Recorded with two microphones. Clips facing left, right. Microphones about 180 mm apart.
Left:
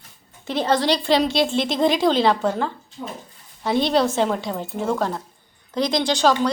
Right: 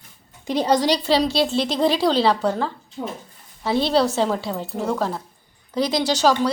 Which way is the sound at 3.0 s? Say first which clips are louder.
Right 4 dB; 75° right (ahead or behind).